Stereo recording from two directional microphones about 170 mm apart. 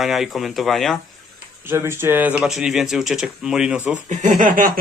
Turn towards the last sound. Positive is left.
turn(degrees=-50)  # may be behind; listen again after turning